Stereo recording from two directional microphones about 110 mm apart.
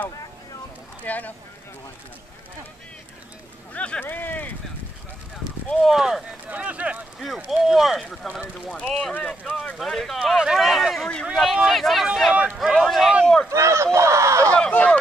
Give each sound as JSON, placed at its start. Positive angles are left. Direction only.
{"t": 1.0, "sound": "speech", "side_deg": 15}
{"t": 3.7, "sound": "speech", "side_deg": 10}
{"t": 5.7, "sound": "speech", "side_deg": 0}
{"t": 6.5, "sound": "speech", "side_deg": -10}
{"t": 13.5, "sound": "speech", "side_deg": -25}
{"t": 14.5, "sound": "speech", "side_deg": 10}